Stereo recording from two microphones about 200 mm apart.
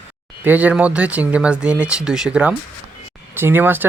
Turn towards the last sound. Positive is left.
turn(degrees=-10)  # may be behind; listen again after turning